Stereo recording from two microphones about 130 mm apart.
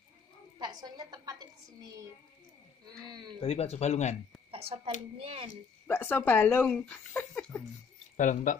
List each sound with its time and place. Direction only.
0.6 s a woman's voice: 30° right (ahead or behind)
3.1 s speech: 35° right (ahead or behind)
3.3 s speech: 55° left (ahead or behind)
4.5 s speech: 45° right (ahead or behind)
5.9 s speech: 15° left (ahead or behind)
8.2 s speech: 70° left (ahead or behind)